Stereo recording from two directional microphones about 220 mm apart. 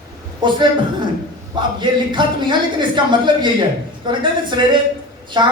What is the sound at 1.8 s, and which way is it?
Speech, 20° right (ahead or behind).